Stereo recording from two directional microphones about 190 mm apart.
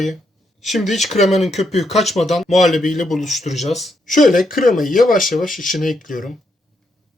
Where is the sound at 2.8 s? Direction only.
40° left (ahead or behind).